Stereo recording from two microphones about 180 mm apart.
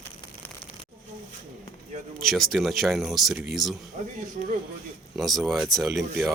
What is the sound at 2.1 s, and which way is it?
Speech, centre (ahead or behind).